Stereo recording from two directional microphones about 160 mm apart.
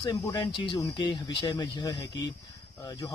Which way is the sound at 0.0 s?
25° left (ahead or behind).